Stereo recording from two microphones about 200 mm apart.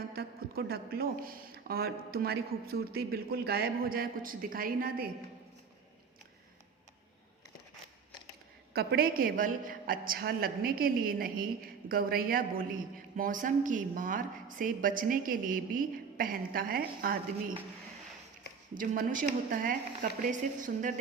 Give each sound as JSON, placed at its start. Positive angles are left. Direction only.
{"t": 0.1, "sound": "speech", "side_deg": -50}
{"t": 8.7, "sound": "speech", "side_deg": -50}
{"t": 18.7, "sound": "a woman's voice", "side_deg": -45}